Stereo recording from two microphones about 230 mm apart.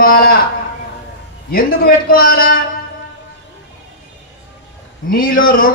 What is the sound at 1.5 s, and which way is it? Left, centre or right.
A man's voice, left.